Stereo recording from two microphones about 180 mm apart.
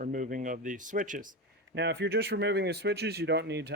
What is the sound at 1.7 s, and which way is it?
Speech, 70° right (ahead or behind).